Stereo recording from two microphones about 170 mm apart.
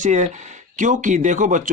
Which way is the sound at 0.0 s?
45° right (ahead or behind).